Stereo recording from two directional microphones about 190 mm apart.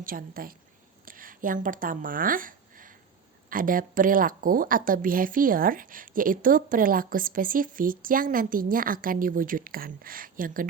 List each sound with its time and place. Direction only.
0.0 s a woman's voice: 50° right (ahead or behind)